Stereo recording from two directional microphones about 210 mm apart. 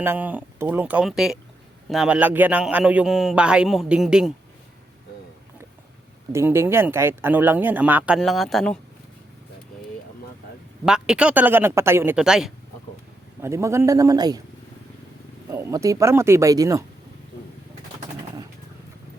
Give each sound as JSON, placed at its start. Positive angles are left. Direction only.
{"t": 0.0, "sound": "a man's voice", "side_deg": -10}
{"t": 6.3, "sound": "speech", "side_deg": -10}
{"t": 10.8, "sound": "a man's voice", "side_deg": -5}
{"t": 13.4, "sound": "speech", "side_deg": -15}
{"t": 15.4, "sound": "speech", "side_deg": -15}